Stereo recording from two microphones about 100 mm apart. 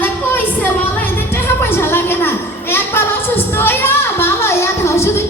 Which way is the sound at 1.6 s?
25° left (ahead or behind).